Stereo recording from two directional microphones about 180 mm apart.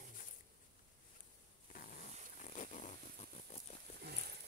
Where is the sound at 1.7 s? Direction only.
45° left (ahead or behind).